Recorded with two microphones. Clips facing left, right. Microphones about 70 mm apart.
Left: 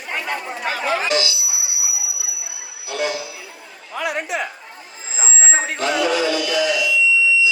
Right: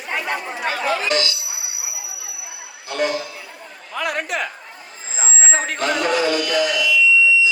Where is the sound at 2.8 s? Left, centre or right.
Right.